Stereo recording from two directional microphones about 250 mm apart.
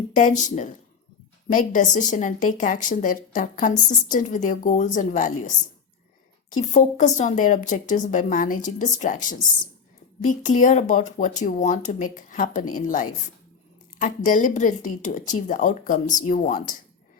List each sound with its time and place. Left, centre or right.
0.1 s a woman's voice: left
6.5 s a woman's voice: left